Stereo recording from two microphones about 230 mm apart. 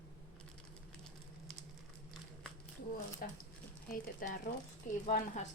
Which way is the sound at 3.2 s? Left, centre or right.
Left.